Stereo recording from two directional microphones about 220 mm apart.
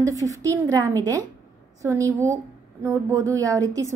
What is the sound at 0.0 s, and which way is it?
A woman's voice, 15° right (ahead or behind).